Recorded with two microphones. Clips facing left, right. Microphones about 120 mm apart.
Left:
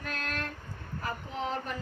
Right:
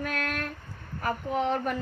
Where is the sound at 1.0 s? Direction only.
55° right (ahead or behind).